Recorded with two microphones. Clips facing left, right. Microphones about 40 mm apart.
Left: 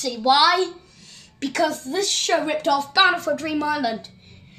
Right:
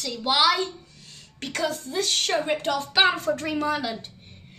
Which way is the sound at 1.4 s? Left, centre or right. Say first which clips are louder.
Left 6 dB; left.